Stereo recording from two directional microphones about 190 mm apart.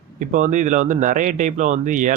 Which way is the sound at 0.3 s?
40° right (ahead or behind).